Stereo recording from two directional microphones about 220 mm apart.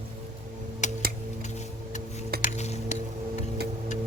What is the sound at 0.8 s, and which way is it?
Music, 35° left (ahead or behind).